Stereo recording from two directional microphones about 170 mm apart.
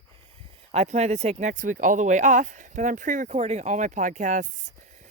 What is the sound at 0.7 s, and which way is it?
Speech, 40° right (ahead or behind).